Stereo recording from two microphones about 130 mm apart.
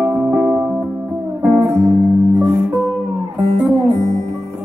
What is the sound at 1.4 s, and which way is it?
Music, 20° right (ahead or behind).